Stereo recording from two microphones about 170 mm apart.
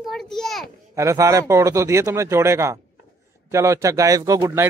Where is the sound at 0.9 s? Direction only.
20° right (ahead or behind).